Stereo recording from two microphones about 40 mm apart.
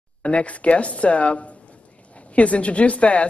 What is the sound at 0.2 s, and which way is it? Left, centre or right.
A woman's voice, left.